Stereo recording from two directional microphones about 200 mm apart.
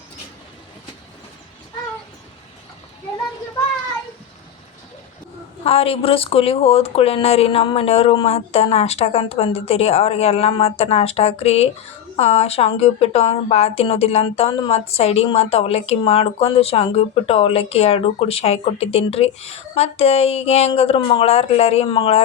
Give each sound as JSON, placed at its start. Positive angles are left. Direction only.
{"t": 5.6, "sound": "a woman's voice", "side_deg": 30}